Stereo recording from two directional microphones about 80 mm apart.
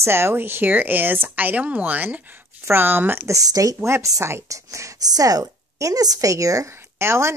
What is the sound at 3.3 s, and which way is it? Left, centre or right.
Speech, right.